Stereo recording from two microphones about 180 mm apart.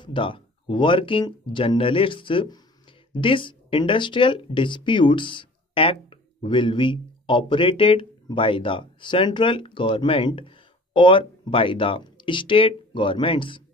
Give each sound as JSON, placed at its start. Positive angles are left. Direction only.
{"t": 0.0, "sound": "speech", "side_deg": 30}